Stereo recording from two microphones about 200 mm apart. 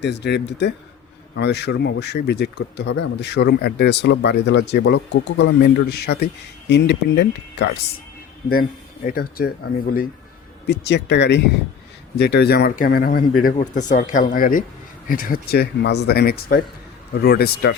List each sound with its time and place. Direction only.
0.0 s speech: 60° left (ahead or behind)
9.0 s speech: 45° left (ahead or behind)
10.7 s speech: 60° left (ahead or behind)